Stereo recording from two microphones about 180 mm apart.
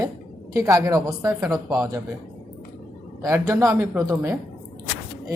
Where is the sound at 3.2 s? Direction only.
15° right (ahead or behind).